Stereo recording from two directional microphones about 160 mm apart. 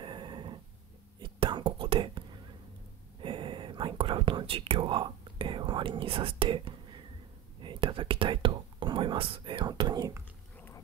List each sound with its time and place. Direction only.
0.0 s dog: 30° right (ahead or behind)
1.2 s whispering: 30° right (ahead or behind)
7.6 s speech: 35° right (ahead or behind)